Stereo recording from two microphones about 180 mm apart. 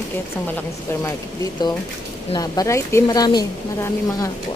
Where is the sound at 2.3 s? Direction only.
20° left (ahead or behind).